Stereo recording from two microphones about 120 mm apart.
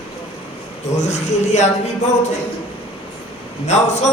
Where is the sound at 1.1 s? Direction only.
75° left (ahead or behind).